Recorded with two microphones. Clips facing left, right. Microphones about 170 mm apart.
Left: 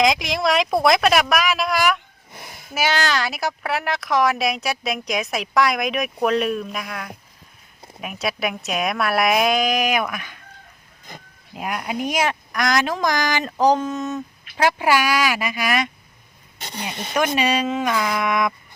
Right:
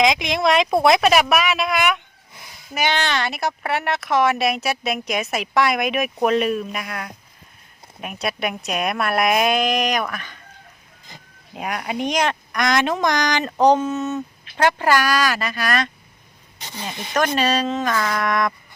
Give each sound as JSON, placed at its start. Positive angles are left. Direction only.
{"t": 0.0, "sound": "speech", "side_deg": 0}
{"t": 2.3, "sound": "a sound", "side_deg": 60}
{"t": 2.7, "sound": "speech", "side_deg": 0}
{"t": 11.5, "sound": "speech", "side_deg": 0}
{"t": 17.2, "sound": "speech", "side_deg": 10}